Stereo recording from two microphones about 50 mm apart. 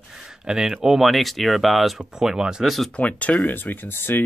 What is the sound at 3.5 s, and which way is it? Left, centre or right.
Speech, left.